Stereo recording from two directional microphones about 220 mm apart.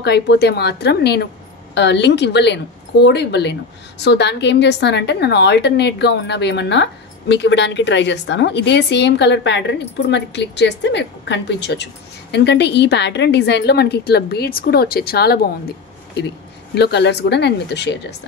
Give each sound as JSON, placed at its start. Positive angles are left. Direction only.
{"t": 0.0, "sound": "a woman's voice", "side_deg": 50}
{"t": 16.7, "sound": "a woman's voice", "side_deg": 50}